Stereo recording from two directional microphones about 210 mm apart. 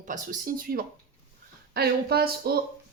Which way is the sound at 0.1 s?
40° right (ahead or behind).